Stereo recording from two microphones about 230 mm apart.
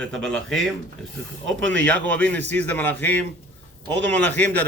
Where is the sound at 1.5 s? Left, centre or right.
Right.